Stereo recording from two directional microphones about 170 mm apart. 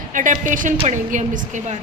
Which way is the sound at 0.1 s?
50° right (ahead or behind).